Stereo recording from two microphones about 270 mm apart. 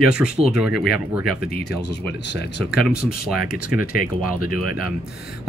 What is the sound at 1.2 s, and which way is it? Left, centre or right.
Speech, left.